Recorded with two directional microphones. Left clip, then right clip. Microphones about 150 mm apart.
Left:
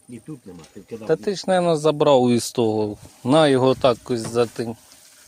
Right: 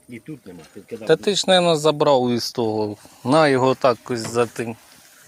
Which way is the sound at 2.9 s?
20° left (ahead or behind).